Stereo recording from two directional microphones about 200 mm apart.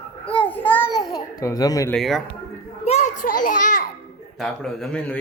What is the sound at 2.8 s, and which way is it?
Speech, 35° left (ahead or behind).